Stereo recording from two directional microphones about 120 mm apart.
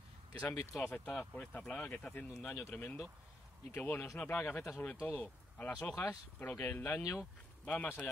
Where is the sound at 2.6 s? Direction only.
15° left (ahead or behind).